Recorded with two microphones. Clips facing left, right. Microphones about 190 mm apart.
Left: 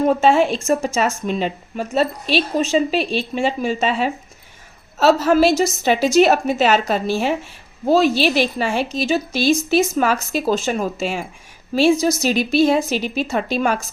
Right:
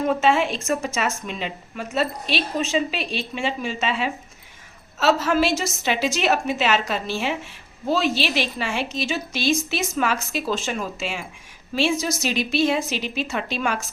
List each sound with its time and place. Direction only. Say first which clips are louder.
0.0 s a woman's voice: left 5 dB; 35° left (ahead or behind)